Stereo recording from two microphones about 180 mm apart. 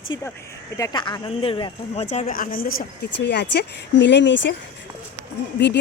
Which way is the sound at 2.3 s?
50° left (ahead or behind).